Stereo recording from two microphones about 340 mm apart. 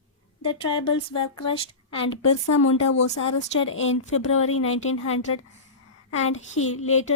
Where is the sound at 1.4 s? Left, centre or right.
Centre.